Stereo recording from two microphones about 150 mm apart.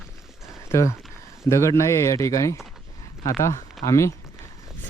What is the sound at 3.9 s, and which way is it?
Speech, 20° left (ahead or behind).